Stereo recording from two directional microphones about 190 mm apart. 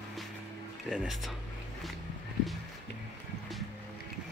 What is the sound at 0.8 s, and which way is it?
Speech, centre (ahead or behind).